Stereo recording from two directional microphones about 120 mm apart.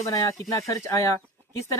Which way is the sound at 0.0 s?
25° left (ahead or behind).